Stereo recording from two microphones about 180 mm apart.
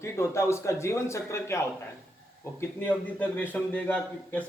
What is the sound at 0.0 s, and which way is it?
A man's voice, 15° left (ahead or behind).